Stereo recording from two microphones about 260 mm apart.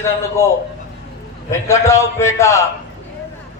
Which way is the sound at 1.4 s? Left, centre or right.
Centre.